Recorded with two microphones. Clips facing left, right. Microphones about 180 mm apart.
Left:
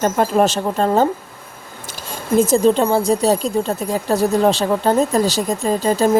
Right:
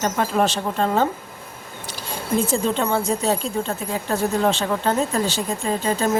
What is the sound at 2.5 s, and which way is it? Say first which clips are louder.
Speech: left 7 dB; 35° left (ahead or behind).